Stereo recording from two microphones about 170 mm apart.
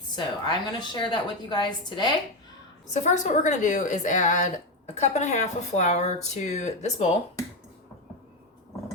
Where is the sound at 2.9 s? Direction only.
45° left (ahead or behind).